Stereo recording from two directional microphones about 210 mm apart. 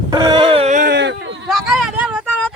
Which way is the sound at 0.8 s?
55° right (ahead or behind).